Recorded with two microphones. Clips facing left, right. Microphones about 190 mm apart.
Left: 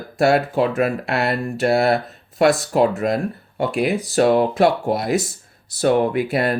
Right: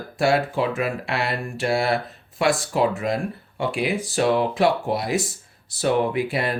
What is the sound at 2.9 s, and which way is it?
Speech, 40° left (ahead or behind).